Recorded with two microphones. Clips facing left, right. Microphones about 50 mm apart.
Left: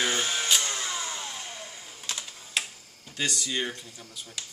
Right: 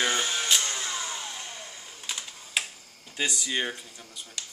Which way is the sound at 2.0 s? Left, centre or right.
Centre.